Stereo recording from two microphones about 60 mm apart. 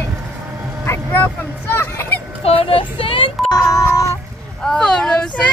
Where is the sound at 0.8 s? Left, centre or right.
Left.